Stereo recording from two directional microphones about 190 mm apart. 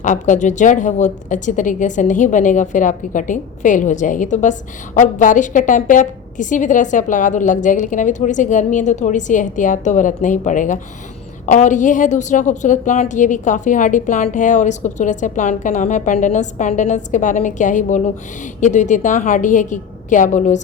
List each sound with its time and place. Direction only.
0.0 s a woman's voice: 40° left (ahead or behind)